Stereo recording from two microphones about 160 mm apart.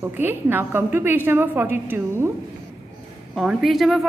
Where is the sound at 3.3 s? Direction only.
Centre (ahead or behind).